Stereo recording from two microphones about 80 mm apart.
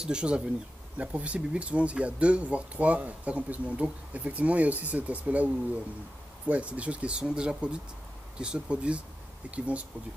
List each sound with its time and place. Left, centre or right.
0.0 s speech: centre